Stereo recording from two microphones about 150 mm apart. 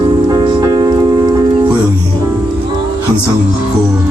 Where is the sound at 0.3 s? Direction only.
30° right (ahead or behind).